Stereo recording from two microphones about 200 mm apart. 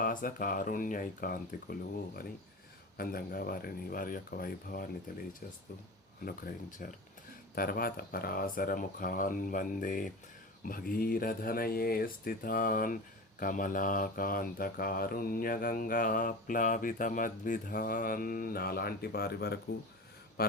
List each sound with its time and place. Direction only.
0.0 s speech: 40° left (ahead or behind)
3.0 s speech: 50° left (ahead or behind)
6.2 s speech: 45° left (ahead or behind)